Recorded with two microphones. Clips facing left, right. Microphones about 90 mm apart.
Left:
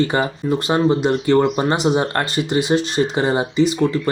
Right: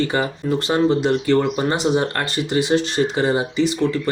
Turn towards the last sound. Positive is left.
turn(degrees=20)  # may be behind; listen again after turning